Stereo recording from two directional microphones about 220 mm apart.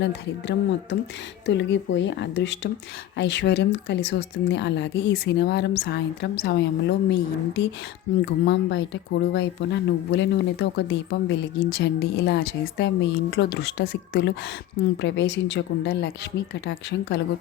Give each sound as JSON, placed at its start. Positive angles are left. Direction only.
{"t": 0.0, "sound": "speech", "side_deg": 55}
{"t": 17.1, "sound": "speech", "side_deg": 50}